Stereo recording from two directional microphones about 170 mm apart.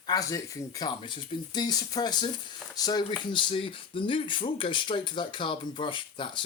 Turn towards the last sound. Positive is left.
turn(degrees=30)  # may be behind; listen again after turning